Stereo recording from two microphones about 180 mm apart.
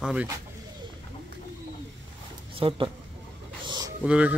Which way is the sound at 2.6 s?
30° right (ahead or behind).